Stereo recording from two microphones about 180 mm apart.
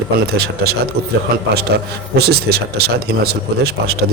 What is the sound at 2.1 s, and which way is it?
Speech, 60° right (ahead or behind).